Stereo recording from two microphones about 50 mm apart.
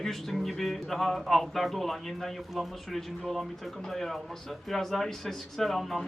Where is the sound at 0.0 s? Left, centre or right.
Centre.